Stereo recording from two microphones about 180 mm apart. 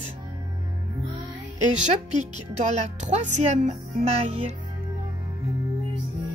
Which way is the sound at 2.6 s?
40° right (ahead or behind).